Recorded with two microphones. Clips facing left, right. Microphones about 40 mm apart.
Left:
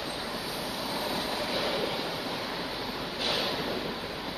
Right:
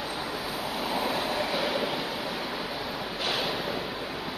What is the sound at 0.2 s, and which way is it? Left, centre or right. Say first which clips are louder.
Train: right 2 dB; right.